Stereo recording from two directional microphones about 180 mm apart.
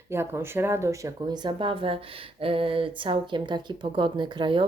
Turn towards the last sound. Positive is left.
turn(degrees=-25)  # may be behind; listen again after turning